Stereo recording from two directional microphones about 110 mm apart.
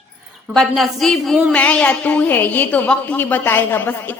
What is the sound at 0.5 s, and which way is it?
Speech, centre (ahead or behind).